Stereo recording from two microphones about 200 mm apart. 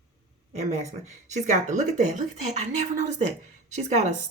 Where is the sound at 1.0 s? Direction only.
35° right (ahead or behind).